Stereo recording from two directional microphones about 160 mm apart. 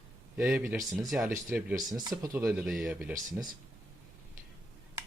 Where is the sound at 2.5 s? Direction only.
5° right (ahead or behind).